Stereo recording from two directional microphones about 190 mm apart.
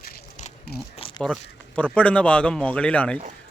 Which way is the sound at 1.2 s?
5° left (ahead or behind).